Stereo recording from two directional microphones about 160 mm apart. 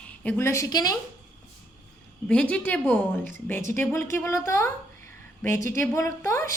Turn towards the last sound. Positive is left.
turn(degrees=20)  # may be behind; listen again after turning